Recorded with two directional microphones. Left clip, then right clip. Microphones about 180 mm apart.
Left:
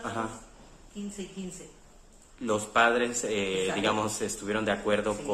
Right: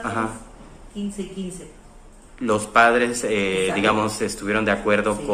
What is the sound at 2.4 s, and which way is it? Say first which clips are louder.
Speech: right 8 dB; 15° left (ahead or behind).